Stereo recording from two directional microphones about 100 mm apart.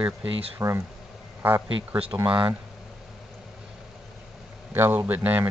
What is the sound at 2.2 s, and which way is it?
Speech, 60° right (ahead or behind).